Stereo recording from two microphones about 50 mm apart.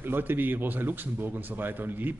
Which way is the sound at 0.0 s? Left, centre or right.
Right.